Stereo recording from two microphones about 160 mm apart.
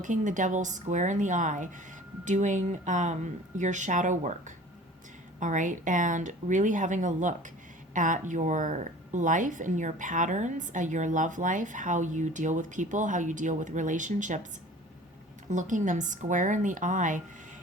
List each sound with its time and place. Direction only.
0.0 s a woman's voice: 50° right (ahead or behind)
15.4 s a woman's voice: 50° right (ahead or behind)